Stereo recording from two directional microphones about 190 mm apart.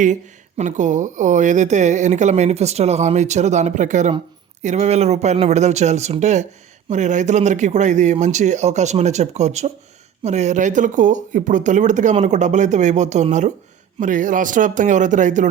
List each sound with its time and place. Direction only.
0.0 s a man's voice: 40° right (ahead or behind)